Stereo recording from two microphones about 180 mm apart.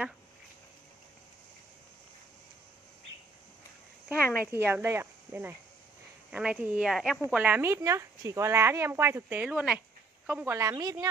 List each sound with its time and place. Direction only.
4.5 s speech: 10° right (ahead or behind)